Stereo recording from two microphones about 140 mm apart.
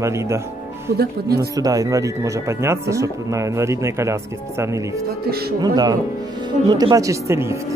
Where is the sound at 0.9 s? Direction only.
90° right.